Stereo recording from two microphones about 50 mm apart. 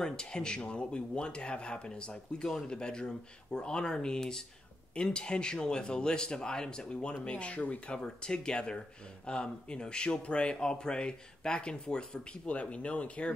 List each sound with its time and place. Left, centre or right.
0.0 s speech: centre